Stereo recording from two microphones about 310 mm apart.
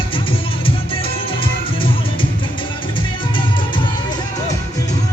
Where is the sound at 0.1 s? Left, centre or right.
Centre.